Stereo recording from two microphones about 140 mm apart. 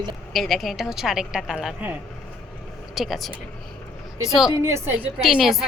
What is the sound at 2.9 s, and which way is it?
A woman's voice, centre (ahead or behind).